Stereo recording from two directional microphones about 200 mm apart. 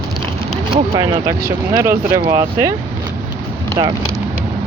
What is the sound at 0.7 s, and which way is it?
Speech, 20° right (ahead or behind).